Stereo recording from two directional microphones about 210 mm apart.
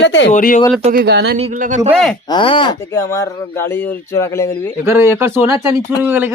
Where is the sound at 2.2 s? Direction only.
20° left (ahead or behind).